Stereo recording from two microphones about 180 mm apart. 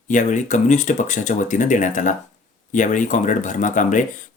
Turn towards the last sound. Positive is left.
turn(degrees=45)  # may be behind; listen again after turning